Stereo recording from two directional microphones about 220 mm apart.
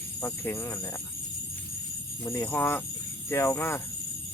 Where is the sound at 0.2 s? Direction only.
10° left (ahead or behind).